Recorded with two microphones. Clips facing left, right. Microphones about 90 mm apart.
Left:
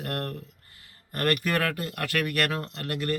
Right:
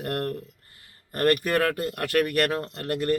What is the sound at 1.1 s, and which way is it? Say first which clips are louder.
Speech: right 4 dB; 40° right (ahead or behind).